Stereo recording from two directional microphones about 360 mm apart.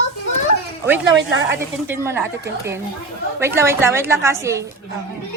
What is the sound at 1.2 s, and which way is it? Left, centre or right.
Speech, right.